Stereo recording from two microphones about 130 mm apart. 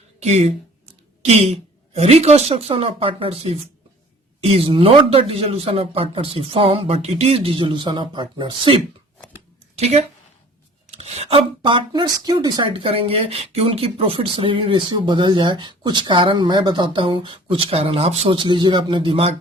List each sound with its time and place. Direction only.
0.2 s speech: 55° right (ahead or behind); by 8.8 s 40° right (ahead or behind)
9.7 s speech: 55° right (ahead or behind)
18.3 s speech: 40° right (ahead or behind)